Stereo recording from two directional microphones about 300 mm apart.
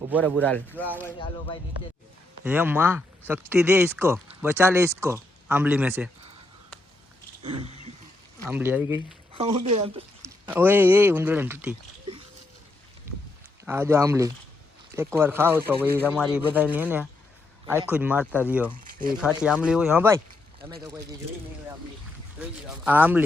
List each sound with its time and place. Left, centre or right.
0.2 s speech: centre
1.0 s speech: centre
2.4 s speech: centre
7.4 s a sound: centre
8.4 s speech: centre
9.4 s speech: centre
10.5 s speech: centre
13.7 s speech: centre
22.4 s speech: centre